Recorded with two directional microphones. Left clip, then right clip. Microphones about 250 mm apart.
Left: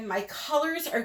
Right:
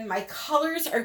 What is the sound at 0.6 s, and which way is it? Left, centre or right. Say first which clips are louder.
Speech: even; right.